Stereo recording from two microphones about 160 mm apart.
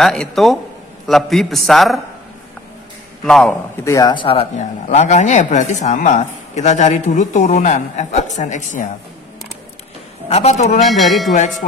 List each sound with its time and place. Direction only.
0.0 s a man's voice: 5° left (ahead or behind)
3.3 s a man's voice: centre (ahead or behind)
3.8 s speech: 20° left (ahead or behind)
4.1 s speech: 35° left (ahead or behind); by 8.9 s 50° left (ahead or behind)
10.3 s speech: 45° left (ahead or behind)
10.8 s a man's voice: centre (ahead or behind)